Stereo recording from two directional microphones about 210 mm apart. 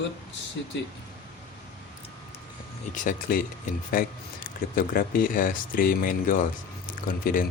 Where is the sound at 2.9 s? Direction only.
40° left (ahead or behind).